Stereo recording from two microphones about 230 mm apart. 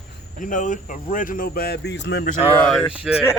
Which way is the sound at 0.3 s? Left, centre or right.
Left.